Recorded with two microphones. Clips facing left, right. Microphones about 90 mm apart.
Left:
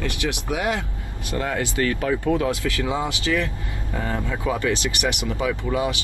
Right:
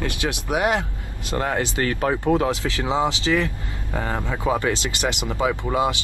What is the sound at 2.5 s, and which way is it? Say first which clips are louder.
Speech: right 1 dB; 25° right (ahead or behind).